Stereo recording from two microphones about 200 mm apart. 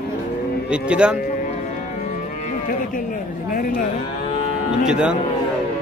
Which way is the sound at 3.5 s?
45° left (ahead or behind).